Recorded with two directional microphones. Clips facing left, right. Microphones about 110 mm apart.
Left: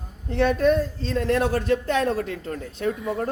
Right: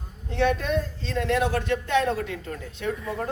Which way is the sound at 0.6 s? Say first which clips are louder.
Left 7 dB; 45° left (ahead or behind).